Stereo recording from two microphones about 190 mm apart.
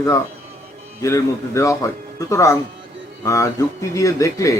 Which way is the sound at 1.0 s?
15° left (ahead or behind).